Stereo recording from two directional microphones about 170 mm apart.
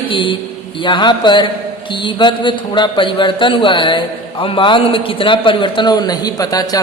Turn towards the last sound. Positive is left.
turn(degrees=20)  # may be behind; listen again after turning